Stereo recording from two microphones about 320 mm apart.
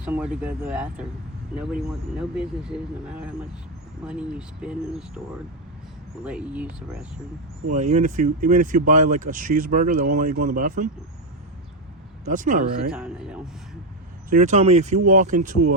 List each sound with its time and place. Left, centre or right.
0.0 s speech: centre
6.2 s speech: centre
7.7 s speech: right
12.2 s speech: right
12.9 s speech: centre
14.3 s speech: right